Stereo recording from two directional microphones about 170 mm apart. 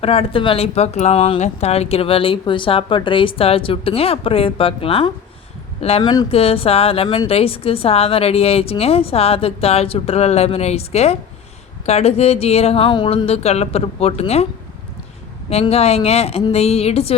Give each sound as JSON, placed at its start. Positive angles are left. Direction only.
{"t": 0.0, "sound": "speech", "side_deg": 35}
{"t": 15.7, "sound": "speech", "side_deg": 35}